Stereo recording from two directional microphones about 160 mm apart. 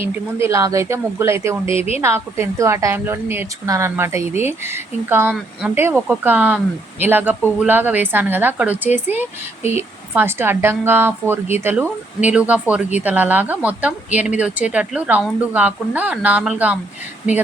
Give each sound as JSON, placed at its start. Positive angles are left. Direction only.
{"t": 0.3, "sound": "a woman's voice", "side_deg": -15}
{"t": 1.7, "sound": "a woman's voice", "side_deg": 40}
{"t": 2.0, "sound": "a woman's voice", "side_deg": -15}
{"t": 10.2, "sound": "a woman's voice", "side_deg": -15}